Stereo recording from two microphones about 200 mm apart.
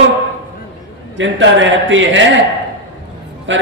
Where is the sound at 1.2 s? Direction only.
70° right (ahead or behind).